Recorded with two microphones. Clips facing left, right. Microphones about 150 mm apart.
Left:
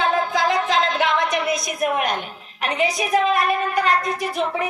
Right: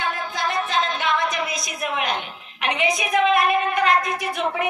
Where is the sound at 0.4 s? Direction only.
90° left; by 4.7 s 35° left (ahead or behind).